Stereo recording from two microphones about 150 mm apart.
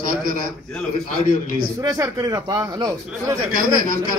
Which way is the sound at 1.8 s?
25° right (ahead or behind).